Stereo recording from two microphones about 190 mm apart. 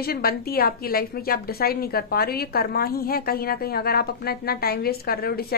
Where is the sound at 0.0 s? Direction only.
55° left (ahead or behind).